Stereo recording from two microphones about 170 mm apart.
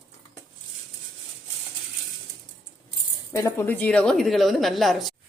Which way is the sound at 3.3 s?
15° left (ahead or behind).